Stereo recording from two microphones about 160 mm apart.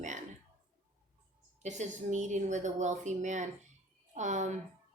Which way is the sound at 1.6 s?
45° right (ahead or behind).